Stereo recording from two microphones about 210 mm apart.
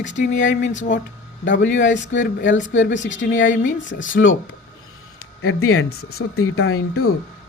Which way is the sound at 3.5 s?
40° left (ahead or behind).